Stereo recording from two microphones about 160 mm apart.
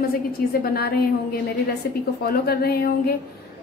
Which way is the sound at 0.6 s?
75° left (ahead or behind).